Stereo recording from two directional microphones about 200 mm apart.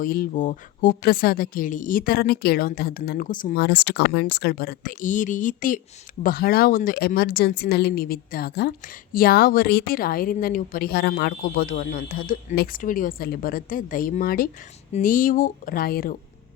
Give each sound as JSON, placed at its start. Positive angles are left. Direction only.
{"t": 0.0, "sound": "speech", "side_deg": 45}